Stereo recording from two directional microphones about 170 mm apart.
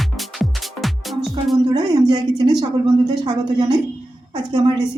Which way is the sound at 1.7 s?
25° right (ahead or behind).